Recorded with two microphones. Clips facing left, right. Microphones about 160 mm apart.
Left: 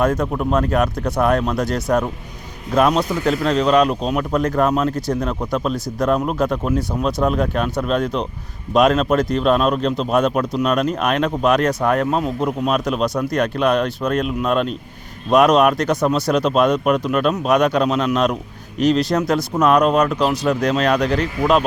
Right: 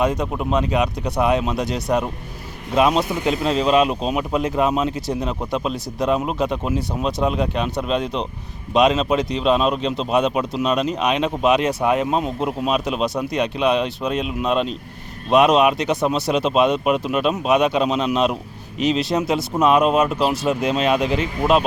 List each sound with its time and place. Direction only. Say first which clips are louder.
0.0 s speech: left 2 dB; centre (ahead or behind)